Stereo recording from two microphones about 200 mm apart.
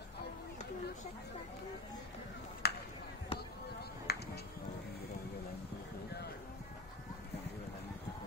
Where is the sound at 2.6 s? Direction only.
50° left (ahead or behind).